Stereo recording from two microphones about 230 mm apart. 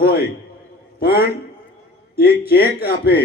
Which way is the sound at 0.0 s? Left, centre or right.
Left.